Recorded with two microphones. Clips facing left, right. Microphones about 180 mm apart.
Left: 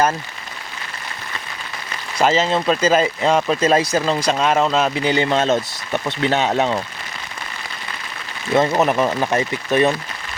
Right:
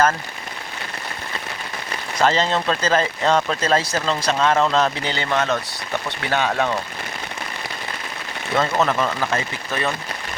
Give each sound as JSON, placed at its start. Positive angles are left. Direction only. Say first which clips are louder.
{"t": 2.1, "sound": "speech", "louder": "left 2 dB", "side_deg": 10}
{"t": 8.5, "sound": "speech", "louder": "left 4 dB", "side_deg": 20}